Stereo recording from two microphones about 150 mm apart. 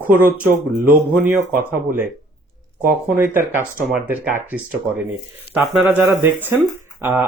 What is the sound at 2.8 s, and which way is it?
Speech, 15° right (ahead or behind).